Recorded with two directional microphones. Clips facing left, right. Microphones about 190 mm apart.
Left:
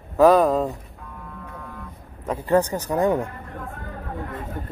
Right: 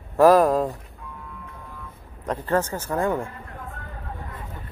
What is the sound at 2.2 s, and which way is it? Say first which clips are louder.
Speech: left 4 dB; 10° left (ahead or behind).